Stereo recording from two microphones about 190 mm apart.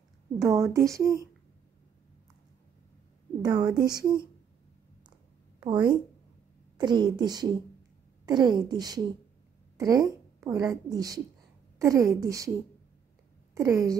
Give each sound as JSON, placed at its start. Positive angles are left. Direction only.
{"t": 0.4, "sound": "speech", "side_deg": -15}
{"t": 3.4, "sound": "speech", "side_deg": -20}
{"t": 5.6, "sound": "speech", "side_deg": -25}
{"t": 9.8, "sound": "a sound", "side_deg": -20}
{"t": 10.7, "sound": "speech", "side_deg": -20}
{"t": 13.6, "sound": "speech", "side_deg": -20}